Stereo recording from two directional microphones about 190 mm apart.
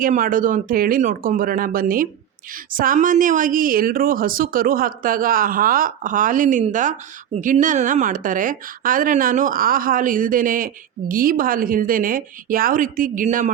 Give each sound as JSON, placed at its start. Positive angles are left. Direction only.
{"t": 0.0, "sound": "speech", "side_deg": -45}